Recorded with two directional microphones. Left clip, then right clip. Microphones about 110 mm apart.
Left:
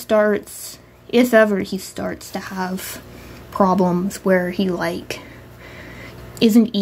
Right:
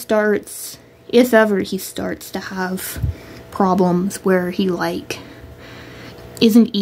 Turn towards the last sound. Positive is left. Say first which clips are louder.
# right 2 dB
turn(degrees=-15)  # may be behind; listen again after turning